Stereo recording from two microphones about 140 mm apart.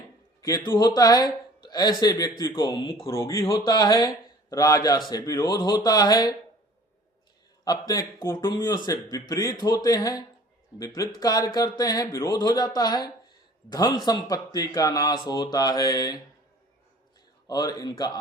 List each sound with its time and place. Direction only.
0.4 s speech: 25° left (ahead or behind)
3.1 s speech: 20° left (ahead or behind)
7.6 s speech: 25° left (ahead or behind)
17.5 s speech: 30° left (ahead or behind)